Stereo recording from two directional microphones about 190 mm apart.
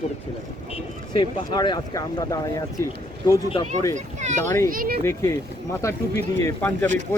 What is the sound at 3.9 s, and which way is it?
Speech, 40° right (ahead or behind).